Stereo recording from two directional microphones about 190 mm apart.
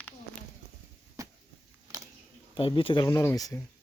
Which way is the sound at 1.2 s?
15° right (ahead or behind).